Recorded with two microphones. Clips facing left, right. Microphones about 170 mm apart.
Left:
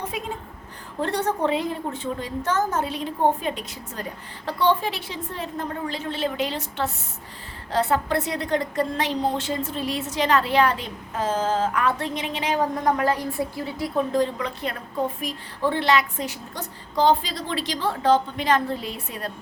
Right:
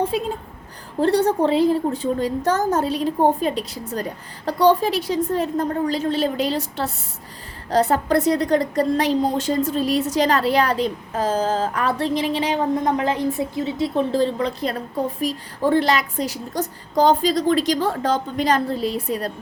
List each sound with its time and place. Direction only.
0.1 s a woman's voice: 35° right (ahead or behind)
12.8 s a woman's voice: 20° right (ahead or behind); by 19.3 s 35° right (ahead or behind)